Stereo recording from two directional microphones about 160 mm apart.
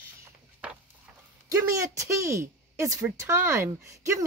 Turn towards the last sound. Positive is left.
turn(degrees=-20)  # may be behind; listen again after turning